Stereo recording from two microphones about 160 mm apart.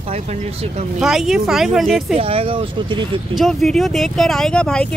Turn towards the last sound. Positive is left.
turn(degrees=5)  # may be behind; listen again after turning